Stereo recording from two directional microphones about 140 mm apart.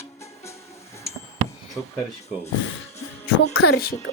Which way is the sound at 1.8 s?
10° left (ahead or behind).